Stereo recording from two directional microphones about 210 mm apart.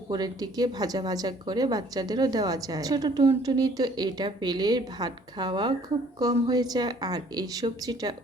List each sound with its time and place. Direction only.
0.1 s a woman's voice: 20° right (ahead or behind)